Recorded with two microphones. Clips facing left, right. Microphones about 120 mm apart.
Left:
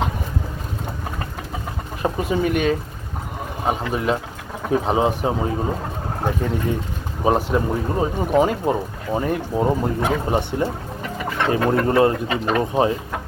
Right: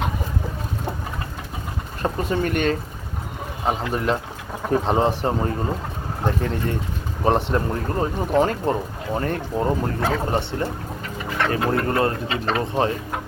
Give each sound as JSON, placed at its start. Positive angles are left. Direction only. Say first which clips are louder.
{"t": 2.0, "sound": "speech", "louder": "left 2 dB", "side_deg": 5}